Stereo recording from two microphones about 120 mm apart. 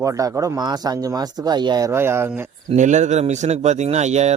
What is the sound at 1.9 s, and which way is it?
Speech, 20° right (ahead or behind).